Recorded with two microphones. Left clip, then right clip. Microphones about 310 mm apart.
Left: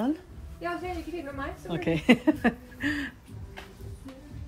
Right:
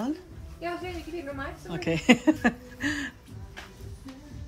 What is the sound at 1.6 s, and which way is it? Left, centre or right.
Speech, centre.